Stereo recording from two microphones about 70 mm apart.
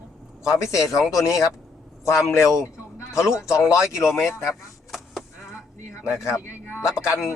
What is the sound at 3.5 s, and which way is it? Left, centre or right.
Speech, left.